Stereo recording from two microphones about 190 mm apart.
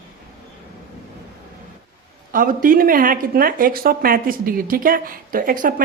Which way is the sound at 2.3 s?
45° right (ahead or behind).